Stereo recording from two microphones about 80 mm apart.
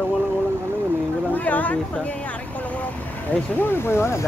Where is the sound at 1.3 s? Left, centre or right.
Centre.